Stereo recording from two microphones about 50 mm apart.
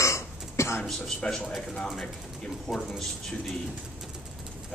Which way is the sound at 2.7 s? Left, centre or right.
Centre.